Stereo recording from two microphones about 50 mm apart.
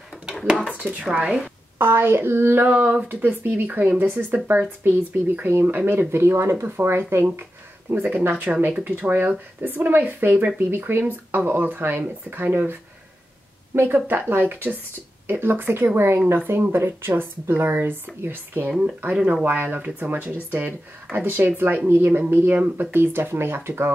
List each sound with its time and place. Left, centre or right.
0.7 s speech: right
1.8 s speech: right
2.6 s speech: right
6.1 s speech: right
7.9 s speech: right
13.9 s speech: right
18.7 s speech: right
19.4 s speech: right